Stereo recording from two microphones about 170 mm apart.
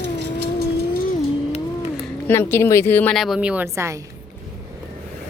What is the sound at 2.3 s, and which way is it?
Speech, 15° left (ahead or behind).